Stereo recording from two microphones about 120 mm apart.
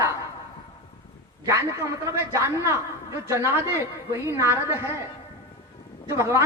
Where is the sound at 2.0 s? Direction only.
25° right (ahead or behind).